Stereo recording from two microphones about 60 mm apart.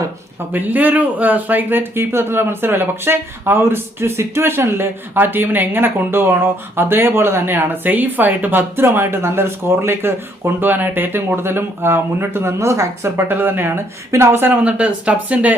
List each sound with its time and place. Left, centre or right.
0.5 s speech: right
13.1 s speech: right
14.1 s speech: right
14.3 s speech: right
14.6 s speech: right